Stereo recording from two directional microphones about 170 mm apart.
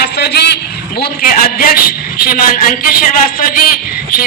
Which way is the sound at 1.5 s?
60° left (ahead or behind).